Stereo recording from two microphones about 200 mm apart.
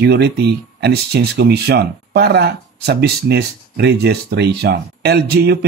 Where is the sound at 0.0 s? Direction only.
55° right (ahead or behind).